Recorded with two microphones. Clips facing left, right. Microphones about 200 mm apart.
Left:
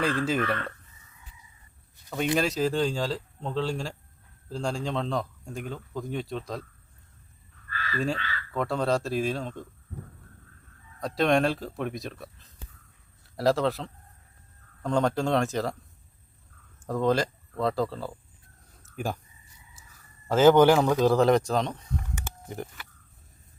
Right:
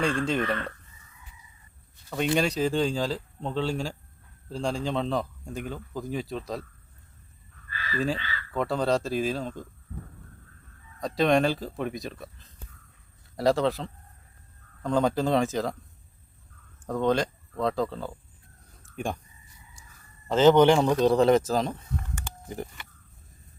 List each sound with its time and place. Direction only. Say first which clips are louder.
0.0 s speech: even; 5° left (ahead or behind)
2.0 s speech: right 1 dB; centre (ahead or behind)
7.9 s speech: right 1 dB; centre (ahead or behind)
11.0 s speech: right 1 dB; centre (ahead or behind)
16.8 s speech: even; centre (ahead or behind)
18.7 s a sound: even; centre (ahead or behind)
20.2 s speech: even; 10° left (ahead or behind)
22.1 s a sound: even; 5° left (ahead or behind)